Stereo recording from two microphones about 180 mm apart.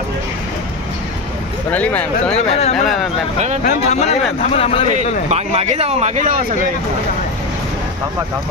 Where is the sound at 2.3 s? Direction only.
35° left (ahead or behind).